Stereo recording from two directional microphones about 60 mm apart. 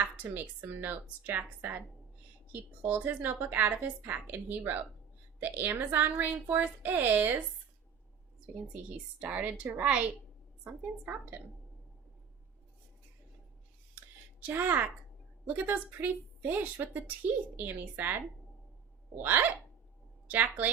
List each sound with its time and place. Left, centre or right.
0.0 s a woman's voice: right
9.1 s a woman's voice: right
14.4 s a woman's voice: right